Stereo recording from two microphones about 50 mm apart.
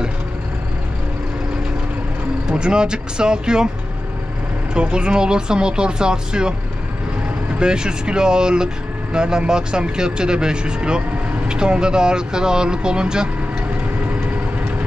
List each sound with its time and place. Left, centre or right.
2.5 s speech: centre
4.7 s speech: centre
7.5 s speech: centre